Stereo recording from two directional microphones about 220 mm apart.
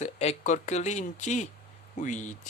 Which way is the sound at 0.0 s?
30° left (ahead or behind).